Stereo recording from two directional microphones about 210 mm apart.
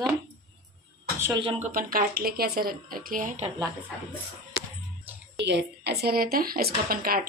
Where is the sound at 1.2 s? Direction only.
20° right (ahead or behind).